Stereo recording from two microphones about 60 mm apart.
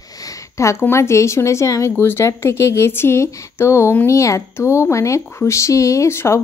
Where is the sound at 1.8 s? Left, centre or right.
Left.